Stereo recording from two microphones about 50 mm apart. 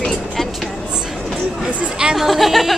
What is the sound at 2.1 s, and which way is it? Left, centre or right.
Speech, centre.